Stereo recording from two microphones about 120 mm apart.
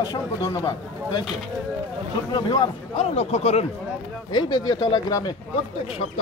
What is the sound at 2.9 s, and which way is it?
Speech, 65° left (ahead or behind).